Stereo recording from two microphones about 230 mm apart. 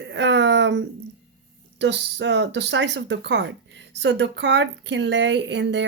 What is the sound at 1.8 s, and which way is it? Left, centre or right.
Speech, right.